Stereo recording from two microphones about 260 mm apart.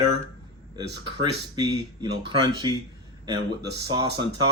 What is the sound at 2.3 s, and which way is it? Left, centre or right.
Speech, centre.